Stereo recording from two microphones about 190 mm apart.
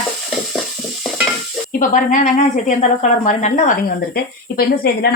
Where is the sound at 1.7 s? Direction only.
40° left (ahead or behind).